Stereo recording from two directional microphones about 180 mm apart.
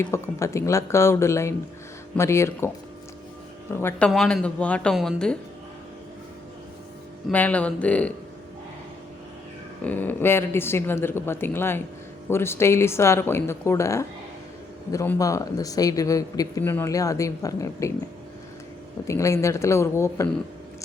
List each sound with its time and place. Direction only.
0.0 s speech: 15° left (ahead or behind)
3.7 s speech: 15° left (ahead or behind)
7.3 s speech: 10° left (ahead or behind)
9.8 s speech: 10° left (ahead or behind)
19.0 s speech: 15° left (ahead or behind)